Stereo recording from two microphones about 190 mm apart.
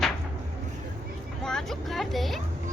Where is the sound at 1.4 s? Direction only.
Centre (ahead or behind).